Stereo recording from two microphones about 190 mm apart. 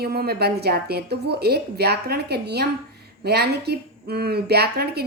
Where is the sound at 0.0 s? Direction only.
55° right (ahead or behind).